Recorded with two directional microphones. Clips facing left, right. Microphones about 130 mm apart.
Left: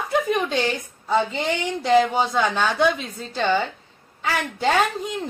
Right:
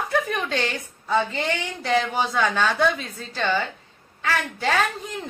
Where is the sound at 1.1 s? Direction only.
20° left (ahead or behind).